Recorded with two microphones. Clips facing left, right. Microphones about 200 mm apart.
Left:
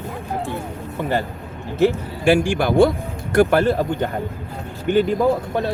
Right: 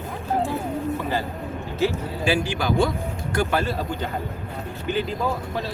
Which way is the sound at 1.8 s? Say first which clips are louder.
Left 6 dB; 55° left (ahead or behind).